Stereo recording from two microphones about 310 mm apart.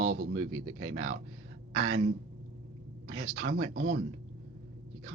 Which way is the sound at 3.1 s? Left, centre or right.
Right.